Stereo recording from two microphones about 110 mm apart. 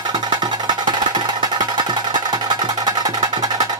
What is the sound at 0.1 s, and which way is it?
Music, 40° right (ahead or behind).